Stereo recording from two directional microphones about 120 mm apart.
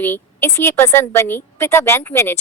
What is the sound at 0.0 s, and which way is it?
A woman's voice, 15° left (ahead or behind).